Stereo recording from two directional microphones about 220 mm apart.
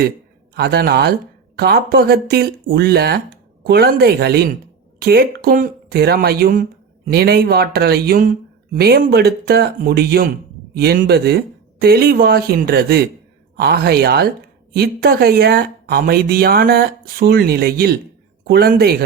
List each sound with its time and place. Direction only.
0.5 s speech: 45° right (ahead or behind)